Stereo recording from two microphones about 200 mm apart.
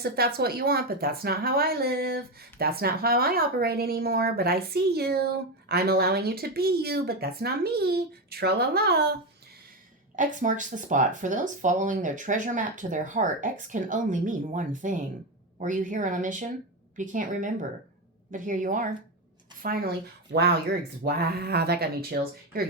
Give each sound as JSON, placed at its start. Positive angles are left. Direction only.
{"t": 0.0, "sound": "speech", "side_deg": -50}
{"t": 10.2, "sound": "speech", "side_deg": -40}
{"t": 21.0, "sound": "speech", "side_deg": -50}